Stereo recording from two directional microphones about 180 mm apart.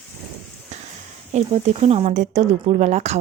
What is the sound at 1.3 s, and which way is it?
Speech, 35° right (ahead or behind).